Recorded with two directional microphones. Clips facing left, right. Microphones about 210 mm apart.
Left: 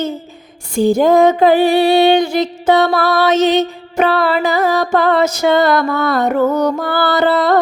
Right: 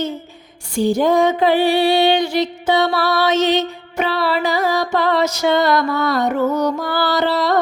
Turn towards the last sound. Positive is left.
turn(degrees=50)  # may be behind; listen again after turning